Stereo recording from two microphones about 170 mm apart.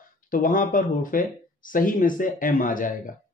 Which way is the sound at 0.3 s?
50° left (ahead or behind).